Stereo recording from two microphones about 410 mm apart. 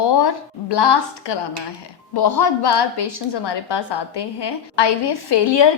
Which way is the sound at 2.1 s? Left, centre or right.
Left.